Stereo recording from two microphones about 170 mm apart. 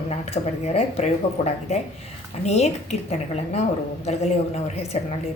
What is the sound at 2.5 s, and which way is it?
A woman's voice, 40° left (ahead or behind).